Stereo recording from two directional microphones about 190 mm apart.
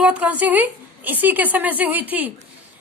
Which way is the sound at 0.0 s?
5° right (ahead or behind).